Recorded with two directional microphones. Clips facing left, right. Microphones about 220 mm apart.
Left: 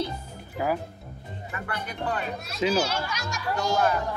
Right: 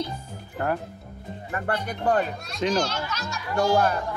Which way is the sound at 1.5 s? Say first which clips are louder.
Right 7 dB; 45° right (ahead or behind).